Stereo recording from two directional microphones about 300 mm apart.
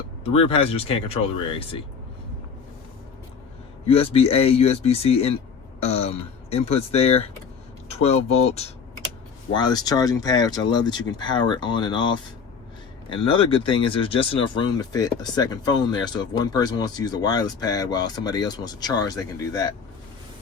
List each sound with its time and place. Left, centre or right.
0.3 s speech: centre
3.8 s speech: centre